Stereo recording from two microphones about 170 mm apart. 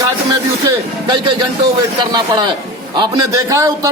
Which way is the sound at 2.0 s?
25° right (ahead or behind).